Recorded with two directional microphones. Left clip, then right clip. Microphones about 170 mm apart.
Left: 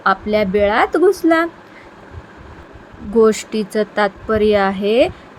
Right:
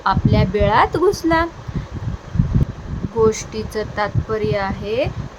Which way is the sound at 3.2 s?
20° left (ahead or behind).